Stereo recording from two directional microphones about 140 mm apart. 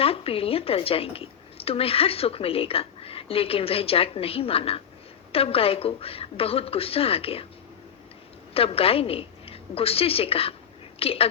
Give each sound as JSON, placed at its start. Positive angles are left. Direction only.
{"t": 0.0, "sound": "a woman's voice", "side_deg": 45}
{"t": 8.5, "sound": "a woman's voice", "side_deg": 45}